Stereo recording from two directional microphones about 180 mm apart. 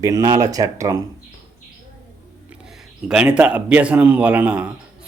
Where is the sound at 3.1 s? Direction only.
5° right (ahead or behind).